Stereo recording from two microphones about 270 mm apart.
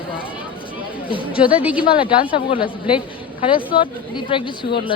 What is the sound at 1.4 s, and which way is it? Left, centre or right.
Speech, centre.